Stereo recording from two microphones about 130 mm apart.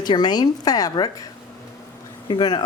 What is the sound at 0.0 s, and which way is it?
Speech, 35° left (ahead or behind).